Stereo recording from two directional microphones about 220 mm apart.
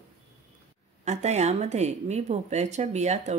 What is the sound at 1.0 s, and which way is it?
Speech, 30° right (ahead or behind).